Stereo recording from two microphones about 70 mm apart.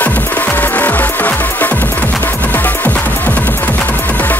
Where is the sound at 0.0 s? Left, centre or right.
Left.